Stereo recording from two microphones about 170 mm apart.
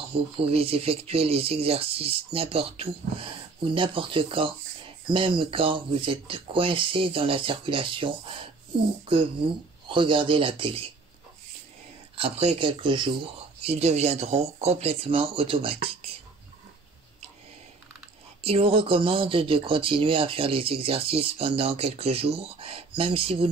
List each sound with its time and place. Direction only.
0.1 s speech: 35° right (ahead or behind)
9.8 s speech: 30° right (ahead or behind)
12.2 s speech: 35° right (ahead or behind)
18.4 s speech: 35° right (ahead or behind)